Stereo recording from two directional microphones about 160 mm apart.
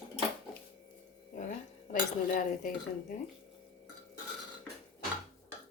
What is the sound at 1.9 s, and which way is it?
Speech, 55° left (ahead or behind).